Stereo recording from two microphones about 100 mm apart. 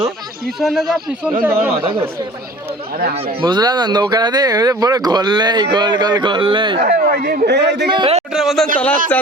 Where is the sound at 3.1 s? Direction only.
75° right (ahead or behind).